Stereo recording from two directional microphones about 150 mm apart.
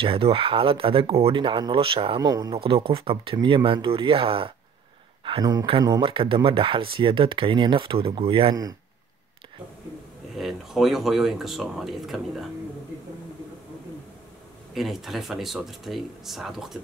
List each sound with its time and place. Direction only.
0.0 s speech: 35° right (ahead or behind)
2.5 s speech: 35° right (ahead or behind)
10.3 s speech: centre (ahead or behind)
14.7 s speech: centre (ahead or behind)